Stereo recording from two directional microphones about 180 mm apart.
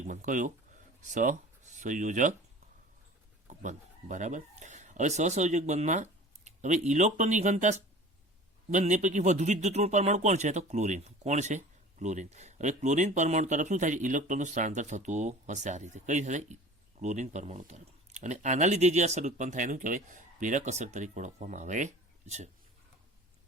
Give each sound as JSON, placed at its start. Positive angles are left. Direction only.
{"t": 0.1, "sound": "speech", "side_deg": -45}
{"t": 3.4, "sound": "speech", "side_deg": -45}